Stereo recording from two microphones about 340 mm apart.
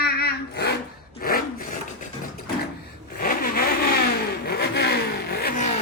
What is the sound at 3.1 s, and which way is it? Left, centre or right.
Vehicle, left.